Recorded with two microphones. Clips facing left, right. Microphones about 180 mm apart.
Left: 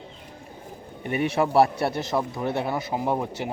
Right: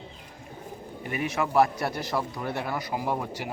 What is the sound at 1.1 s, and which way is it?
A man's voice, 30° left (ahead or behind).